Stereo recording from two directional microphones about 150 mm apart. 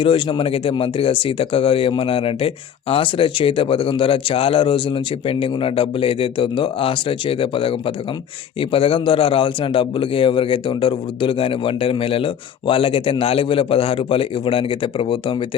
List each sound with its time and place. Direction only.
0.0 s a man's voice: 35° left (ahead or behind)